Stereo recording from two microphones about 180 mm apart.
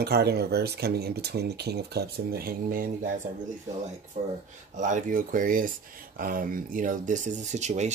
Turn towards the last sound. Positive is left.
turn(degrees=-40)  # may be behind; listen again after turning